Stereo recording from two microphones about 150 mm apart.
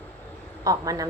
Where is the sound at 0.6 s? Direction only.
25° right (ahead or behind).